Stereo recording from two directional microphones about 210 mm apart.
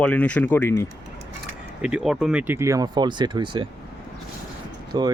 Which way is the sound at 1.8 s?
5° right (ahead or behind).